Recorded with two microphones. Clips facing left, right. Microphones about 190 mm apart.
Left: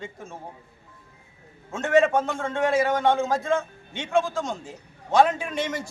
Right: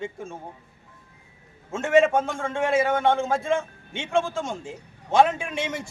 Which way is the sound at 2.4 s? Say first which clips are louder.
Even; 10° right (ahead or behind).